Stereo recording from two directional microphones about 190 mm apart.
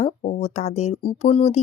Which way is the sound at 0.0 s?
35° left (ahead or behind).